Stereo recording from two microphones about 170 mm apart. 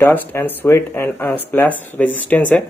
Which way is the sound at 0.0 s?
10° left (ahead or behind).